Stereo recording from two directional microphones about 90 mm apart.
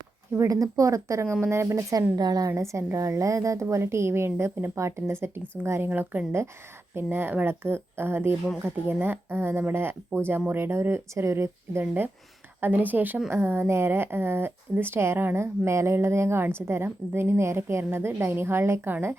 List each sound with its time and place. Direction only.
0.3 s a woman's voice: 40° right (ahead or behind)
2.5 s a woman's voice: 30° right (ahead or behind)